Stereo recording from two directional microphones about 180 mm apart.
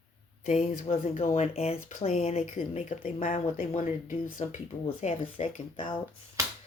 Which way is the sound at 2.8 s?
50° left (ahead or behind).